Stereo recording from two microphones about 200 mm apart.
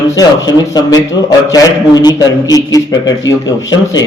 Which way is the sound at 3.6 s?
20° left (ahead or behind).